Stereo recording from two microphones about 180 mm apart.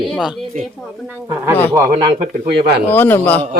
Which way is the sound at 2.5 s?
60° right (ahead or behind).